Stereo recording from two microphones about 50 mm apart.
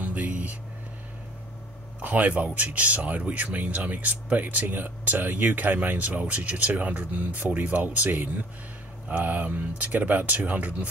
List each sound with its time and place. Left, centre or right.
0.0 s vehicle: right
2.0 s speech: right